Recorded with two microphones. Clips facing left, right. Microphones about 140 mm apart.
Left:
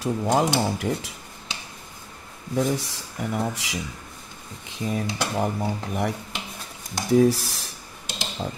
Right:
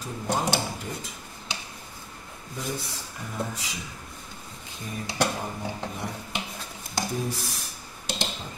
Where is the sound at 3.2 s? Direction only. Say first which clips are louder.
Left 7 dB; 85° left.